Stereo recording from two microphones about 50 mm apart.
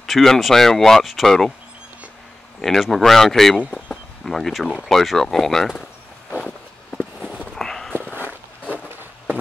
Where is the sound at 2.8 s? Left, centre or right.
Centre.